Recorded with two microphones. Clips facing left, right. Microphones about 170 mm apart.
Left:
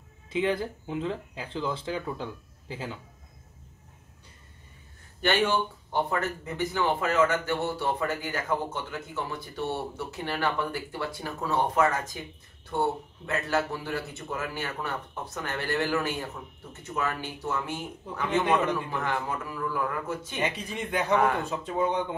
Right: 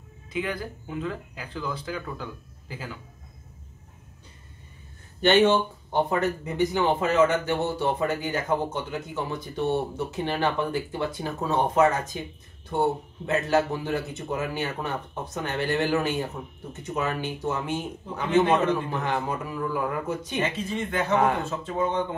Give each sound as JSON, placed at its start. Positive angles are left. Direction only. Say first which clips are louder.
{"t": 0.3, "sound": "speech", "louder": "left 3 dB", "side_deg": 25}
{"t": 5.2, "sound": "speech", "louder": "right 6 dB", "side_deg": -25}
{"t": 20.3, "sound": "a man's voice", "louder": "right 3 dB", "side_deg": 15}